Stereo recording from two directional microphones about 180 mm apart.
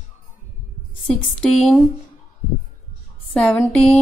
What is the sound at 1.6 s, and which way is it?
Speech, centre (ahead or behind).